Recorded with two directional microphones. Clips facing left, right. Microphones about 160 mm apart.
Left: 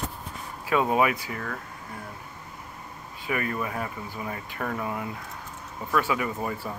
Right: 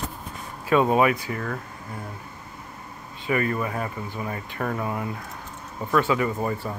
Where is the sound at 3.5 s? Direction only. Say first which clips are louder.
Right 3 dB; 20° right (ahead or behind).